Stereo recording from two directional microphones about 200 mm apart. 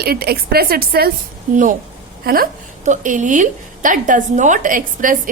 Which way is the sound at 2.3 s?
50° right (ahead or behind).